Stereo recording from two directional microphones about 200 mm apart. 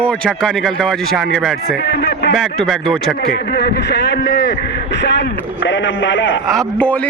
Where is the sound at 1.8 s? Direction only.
60° left (ahead or behind).